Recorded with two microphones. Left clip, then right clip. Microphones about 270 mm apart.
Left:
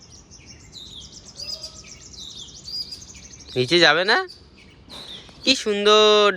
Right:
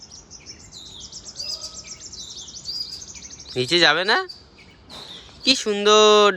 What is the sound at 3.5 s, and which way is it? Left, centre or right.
Speech, centre.